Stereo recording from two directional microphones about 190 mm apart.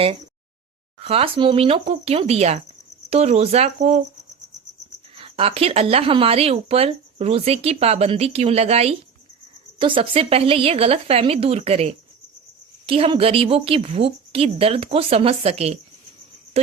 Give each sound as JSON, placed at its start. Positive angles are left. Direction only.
{"t": 1.0, "sound": "speech", "side_deg": -30}
{"t": 5.1, "sound": "speech", "side_deg": -30}